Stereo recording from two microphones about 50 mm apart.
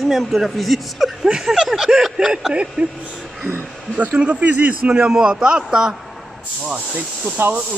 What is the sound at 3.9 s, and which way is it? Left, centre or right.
A man's voice, right.